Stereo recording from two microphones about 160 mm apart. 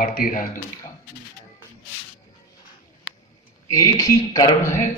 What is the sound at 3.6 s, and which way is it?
A man's voice, 20° left (ahead or behind).